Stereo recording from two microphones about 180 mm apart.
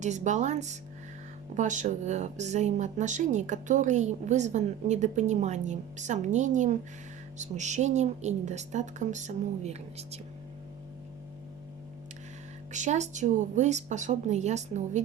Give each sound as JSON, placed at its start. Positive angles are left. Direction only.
{"t": 0.0, "sound": "a woman's voice", "side_deg": -40}
{"t": 12.7, "sound": "a woman's voice", "side_deg": -40}